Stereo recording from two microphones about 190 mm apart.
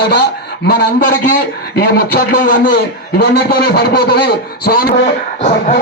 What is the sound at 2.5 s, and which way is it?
Speech, 45° left (ahead or behind).